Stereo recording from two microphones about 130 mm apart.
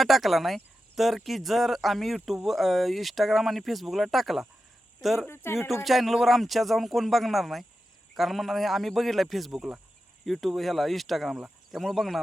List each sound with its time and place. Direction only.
0.0 s speech: centre (ahead or behind)
5.3 s speech: 20° left (ahead or behind)
5.8 s speech: centre (ahead or behind)